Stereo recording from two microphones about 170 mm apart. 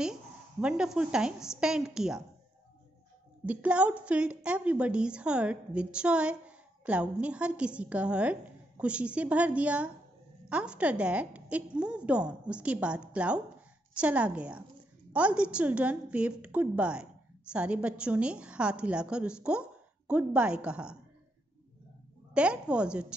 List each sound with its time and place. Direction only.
0.0 s a woman's voice: 5° right (ahead or behind)
3.4 s a woman's voice: 10° right (ahead or behind)
22.3 s a woman's voice: 5° right (ahead or behind)